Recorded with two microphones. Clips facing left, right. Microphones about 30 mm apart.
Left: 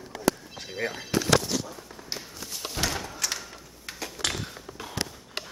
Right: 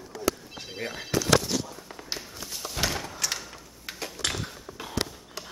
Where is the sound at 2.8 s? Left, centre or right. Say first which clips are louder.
Right 1 dB; centre.